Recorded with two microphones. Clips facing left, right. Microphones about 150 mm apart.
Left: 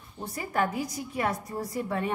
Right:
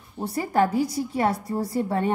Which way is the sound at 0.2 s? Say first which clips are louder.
Right 7 dB; 35° right (ahead or behind).